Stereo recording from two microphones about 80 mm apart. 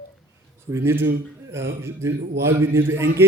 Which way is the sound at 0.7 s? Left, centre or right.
Right.